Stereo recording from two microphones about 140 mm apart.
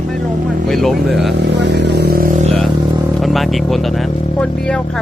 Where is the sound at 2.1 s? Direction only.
90° right.